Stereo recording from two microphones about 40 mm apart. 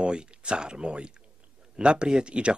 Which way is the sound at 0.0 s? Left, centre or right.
Right.